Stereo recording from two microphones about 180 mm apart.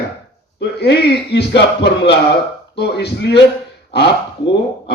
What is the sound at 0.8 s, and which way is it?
A man's voice, 65° left (ahead or behind).